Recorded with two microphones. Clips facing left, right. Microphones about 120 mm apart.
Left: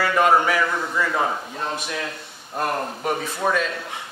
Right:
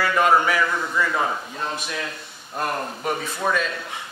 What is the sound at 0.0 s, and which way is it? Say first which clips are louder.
A man's voice: left 1 dB; 40° left (ahead or behind).